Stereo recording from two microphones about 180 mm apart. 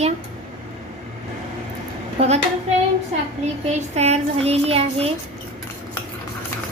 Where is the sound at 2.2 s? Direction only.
35° right (ahead or behind).